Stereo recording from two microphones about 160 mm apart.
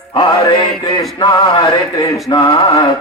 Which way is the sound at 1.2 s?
30° left (ahead or behind).